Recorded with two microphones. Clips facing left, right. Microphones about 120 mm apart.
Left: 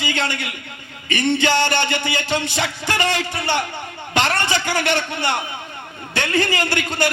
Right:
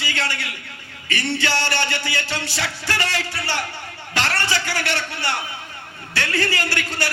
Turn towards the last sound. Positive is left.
turn(degrees=20)  # may be behind; listen again after turning